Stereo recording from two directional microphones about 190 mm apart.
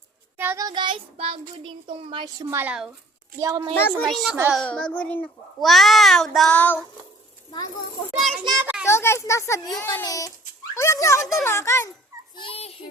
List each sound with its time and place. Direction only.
0.3 s child singing: 15° right (ahead or behind)
3.4 s child singing: 20° right (ahead or behind)
3.8 s a child's voice: 10° left (ahead or behind)
8.4 s a child's voice: 15° right (ahead or behind)
8.9 s speech: 15° left (ahead or behind)
12.4 s a child's voice: 30° left (ahead or behind)